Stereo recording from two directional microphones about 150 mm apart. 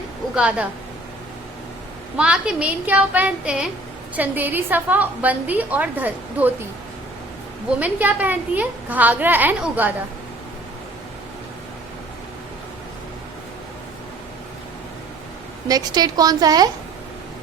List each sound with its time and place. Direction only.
0.3 s a woman's voice: 10° right (ahead or behind)
2.1 s a woman's voice: 5° right (ahead or behind)
7.8 s a woman's voice: 10° right (ahead or behind)
15.6 s a woman's voice: 25° right (ahead or behind)